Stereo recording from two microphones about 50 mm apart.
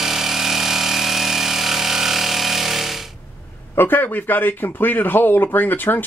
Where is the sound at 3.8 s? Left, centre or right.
Left.